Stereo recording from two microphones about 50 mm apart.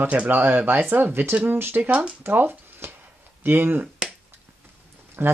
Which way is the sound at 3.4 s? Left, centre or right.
Right.